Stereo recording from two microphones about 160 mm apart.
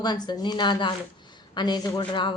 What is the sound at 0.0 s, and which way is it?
A woman's voice, 25° left (ahead or behind).